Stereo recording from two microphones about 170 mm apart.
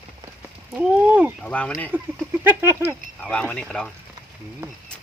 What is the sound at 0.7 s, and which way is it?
Speech, 5° right (ahead or behind).